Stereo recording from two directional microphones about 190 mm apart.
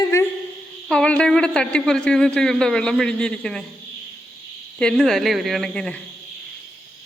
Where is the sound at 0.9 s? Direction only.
5° left (ahead or behind).